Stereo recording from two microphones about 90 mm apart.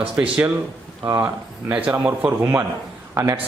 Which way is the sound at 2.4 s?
25° right (ahead or behind).